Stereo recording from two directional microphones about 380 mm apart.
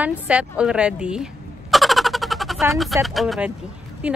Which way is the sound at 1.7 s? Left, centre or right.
Centre.